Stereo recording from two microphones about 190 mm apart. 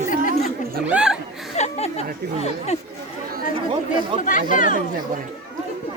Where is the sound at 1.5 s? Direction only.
35° left (ahead or behind).